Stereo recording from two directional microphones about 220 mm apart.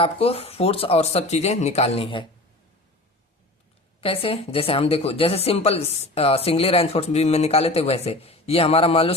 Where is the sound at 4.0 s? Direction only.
25° left (ahead or behind).